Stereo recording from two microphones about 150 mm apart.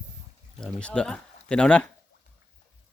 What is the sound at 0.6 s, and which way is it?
Speech, 5° left (ahead or behind).